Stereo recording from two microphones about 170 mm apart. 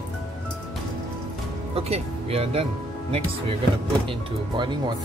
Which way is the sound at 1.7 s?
35° right (ahead or behind).